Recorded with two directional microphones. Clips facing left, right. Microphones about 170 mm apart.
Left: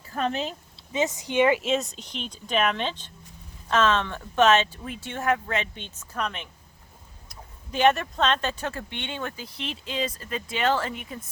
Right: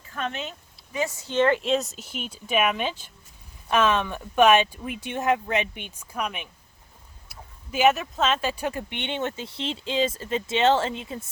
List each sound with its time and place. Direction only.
0.1 s speech: 35° left (ahead or behind)
0.9 s speech: 20° left (ahead or behind); by 11.2 s 25° right (ahead or behind)